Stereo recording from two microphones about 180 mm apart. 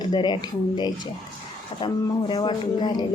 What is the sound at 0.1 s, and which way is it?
Speech, 25° left (ahead or behind).